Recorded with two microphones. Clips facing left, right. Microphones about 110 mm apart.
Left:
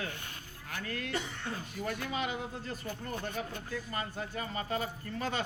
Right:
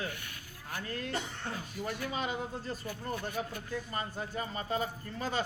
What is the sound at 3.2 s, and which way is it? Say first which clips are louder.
Speech: right 1 dB; 20° right (ahead or behind).